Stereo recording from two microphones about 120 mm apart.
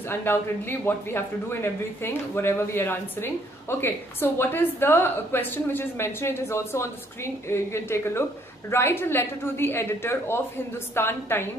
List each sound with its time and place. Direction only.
0.1 s speech: 20° left (ahead or behind)